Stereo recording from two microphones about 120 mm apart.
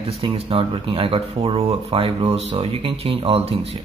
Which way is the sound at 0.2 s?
50° right (ahead or behind).